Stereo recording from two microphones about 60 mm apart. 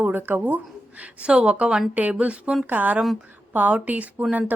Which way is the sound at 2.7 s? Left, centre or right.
Right.